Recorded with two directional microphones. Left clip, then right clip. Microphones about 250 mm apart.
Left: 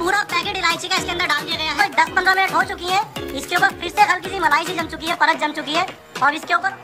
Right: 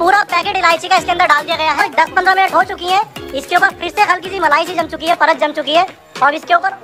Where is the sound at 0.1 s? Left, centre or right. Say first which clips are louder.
Right 7 dB; centre.